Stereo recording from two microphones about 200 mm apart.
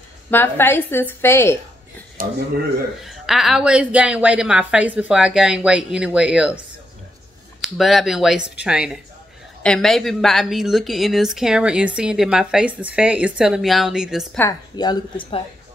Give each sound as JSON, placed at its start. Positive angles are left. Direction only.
{"t": 0.3, "sound": "a woman's voice", "side_deg": 10}
{"t": 2.2, "sound": "speech", "side_deg": -45}
{"t": 3.1, "sound": "a woman's voice", "side_deg": 0}
{"t": 7.6, "sound": "a woman's voice", "side_deg": 0}
{"t": 14.4, "sound": "a woman's voice", "side_deg": 20}